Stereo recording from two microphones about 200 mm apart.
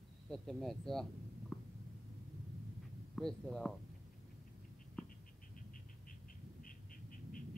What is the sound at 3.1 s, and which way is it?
Speech, 5° left (ahead or behind).